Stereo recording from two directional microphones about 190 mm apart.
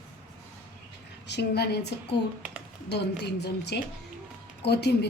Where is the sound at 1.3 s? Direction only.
60° left (ahead or behind).